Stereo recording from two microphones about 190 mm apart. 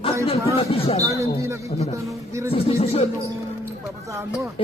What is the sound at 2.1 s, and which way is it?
Speech, 15° right (ahead or behind).